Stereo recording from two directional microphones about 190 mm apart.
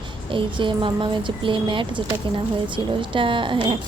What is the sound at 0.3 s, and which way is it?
Speech, 25° right (ahead or behind).